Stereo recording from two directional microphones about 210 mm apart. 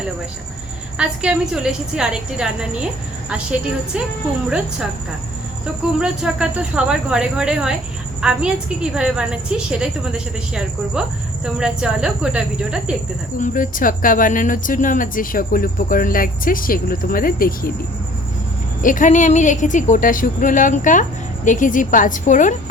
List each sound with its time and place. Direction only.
0.9 s a woman's voice: 5° right (ahead or behind)
4.4 s a woman's voice: 5° right (ahead or behind)
6.0 s a woman's voice: 5° right (ahead or behind)
13.4 s speech: 40° left (ahead or behind)
18.8 s speech: 40° left (ahead or behind)